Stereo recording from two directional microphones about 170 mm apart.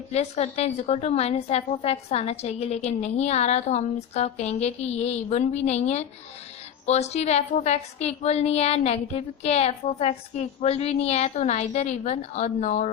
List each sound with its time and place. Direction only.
0.1 s a woman's voice: 40° left (ahead or behind)